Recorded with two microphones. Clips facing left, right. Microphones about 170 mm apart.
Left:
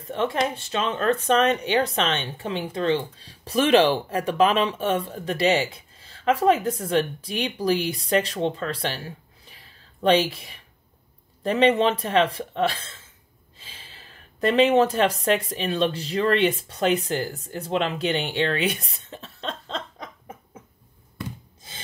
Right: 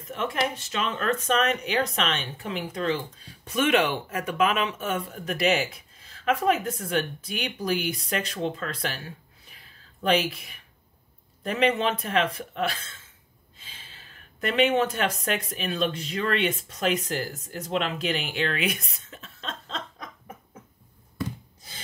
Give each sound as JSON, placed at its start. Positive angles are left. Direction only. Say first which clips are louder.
{"t": 0.0, "sound": "speech", "louder": "left 4 dB", "side_deg": 30}
{"t": 14.4, "sound": "speech", "louder": "left 5 dB", "side_deg": 35}